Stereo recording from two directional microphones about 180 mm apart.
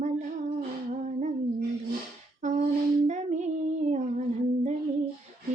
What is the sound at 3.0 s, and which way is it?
Child singing, 40° right (ahead or behind).